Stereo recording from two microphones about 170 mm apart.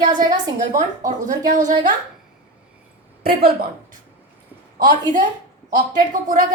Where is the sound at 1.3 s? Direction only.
45° right (ahead or behind).